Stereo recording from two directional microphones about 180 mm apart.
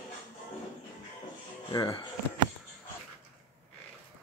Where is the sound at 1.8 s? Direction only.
30° left (ahead or behind).